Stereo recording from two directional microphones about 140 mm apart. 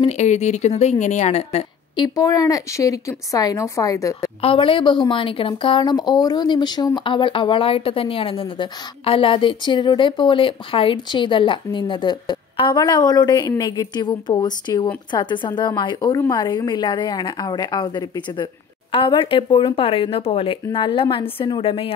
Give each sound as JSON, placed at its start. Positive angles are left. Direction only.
{"t": 0.0, "sound": "a woman's voice", "side_deg": 55}
{"t": 2.0, "sound": "speech", "side_deg": 25}
{"t": 4.4, "sound": "speech", "side_deg": 40}